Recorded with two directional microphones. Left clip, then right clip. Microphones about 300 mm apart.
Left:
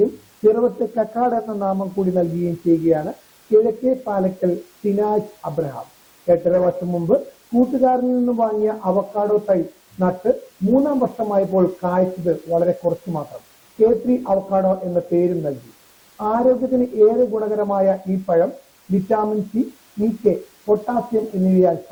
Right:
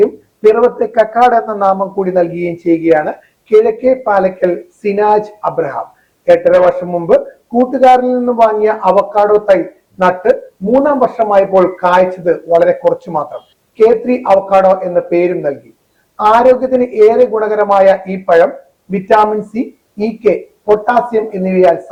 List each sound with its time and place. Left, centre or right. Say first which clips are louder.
0.5 s a man's voice: right 9 dB; centre
2.4 s speech: right 5 dB; right
2.9 s a man's voice: right 9 dB; centre
19.5 s speech: right 5 dB; right
20.7 s a man's voice: right 9 dB; centre